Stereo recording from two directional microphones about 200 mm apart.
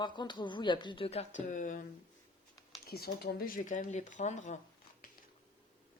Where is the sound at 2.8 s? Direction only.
50° left (ahead or behind).